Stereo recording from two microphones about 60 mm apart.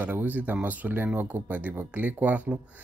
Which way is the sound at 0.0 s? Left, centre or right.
Right.